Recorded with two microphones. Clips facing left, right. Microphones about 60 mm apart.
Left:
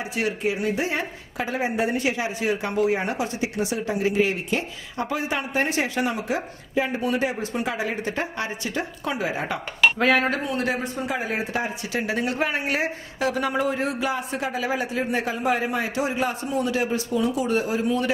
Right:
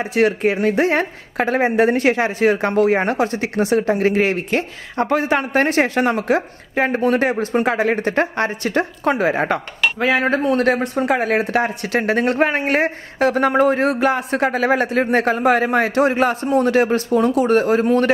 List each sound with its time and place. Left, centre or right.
0.0 s speech: right
9.9 s speech: centre
10.3 s speech: right